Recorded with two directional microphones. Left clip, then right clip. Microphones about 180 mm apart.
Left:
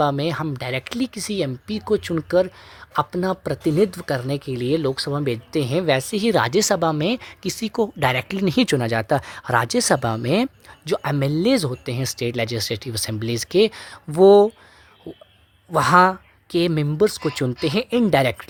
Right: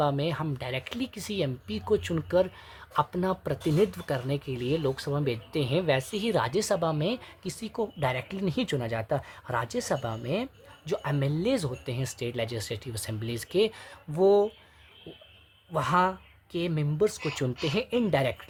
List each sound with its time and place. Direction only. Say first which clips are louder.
0.0 s speech: left 7 dB; 40° left (ahead or behind)
15.7 s speech: left 11 dB; 50° left (ahead or behind)